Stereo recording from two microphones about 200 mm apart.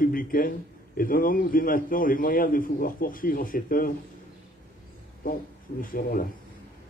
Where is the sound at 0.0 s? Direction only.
45° left (ahead or behind).